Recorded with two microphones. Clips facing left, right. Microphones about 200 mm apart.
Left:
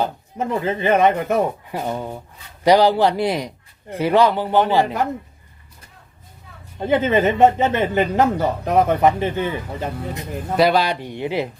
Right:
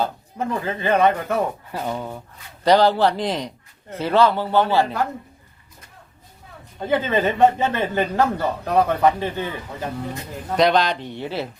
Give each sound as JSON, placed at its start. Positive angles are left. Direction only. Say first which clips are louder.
{"t": 0.0, "sound": "speech", "louder": "left 1 dB", "side_deg": 20}
{"t": 6.7, "sound": "speech", "louder": "left 3 dB", "side_deg": 20}
{"t": 10.6, "sound": "speech", "louder": "left 1 dB", "side_deg": 5}